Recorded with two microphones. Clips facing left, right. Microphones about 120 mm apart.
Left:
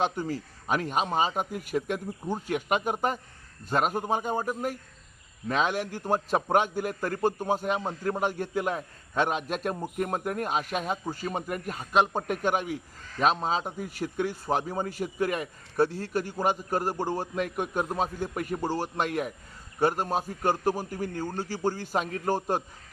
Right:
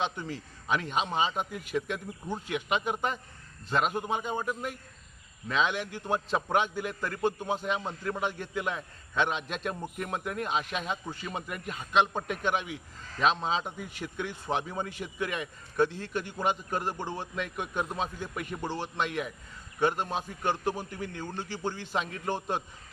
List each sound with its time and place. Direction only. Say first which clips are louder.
0.0 s a man's voice: left 5 dB; 40° left (ahead or behind)